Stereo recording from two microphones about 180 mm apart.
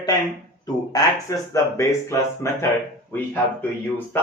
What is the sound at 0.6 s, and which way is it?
Speech, 20° left (ahead or behind).